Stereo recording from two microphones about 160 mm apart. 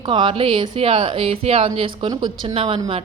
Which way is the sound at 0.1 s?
30° right (ahead or behind).